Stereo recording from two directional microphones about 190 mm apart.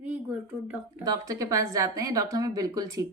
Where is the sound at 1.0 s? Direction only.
20° right (ahead or behind).